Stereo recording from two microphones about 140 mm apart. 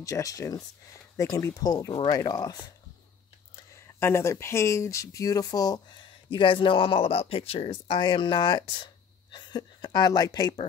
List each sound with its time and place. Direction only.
0.0 s speech: 25° left (ahead or behind)